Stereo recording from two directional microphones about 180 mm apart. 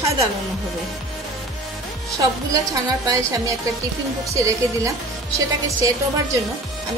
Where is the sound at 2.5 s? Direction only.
20° right (ahead or behind).